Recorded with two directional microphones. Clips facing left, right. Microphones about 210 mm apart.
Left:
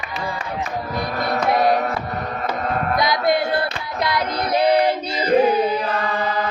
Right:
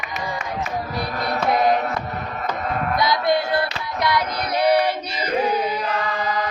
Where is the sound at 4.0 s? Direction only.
25° left (ahead or behind).